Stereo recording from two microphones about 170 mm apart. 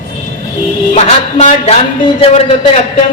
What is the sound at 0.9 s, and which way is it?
Speech, 40° left (ahead or behind).